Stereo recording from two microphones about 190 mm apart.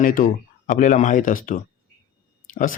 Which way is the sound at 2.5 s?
40° left (ahead or behind).